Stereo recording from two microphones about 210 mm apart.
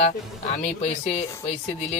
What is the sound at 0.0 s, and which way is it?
Speech, 30° left (ahead or behind).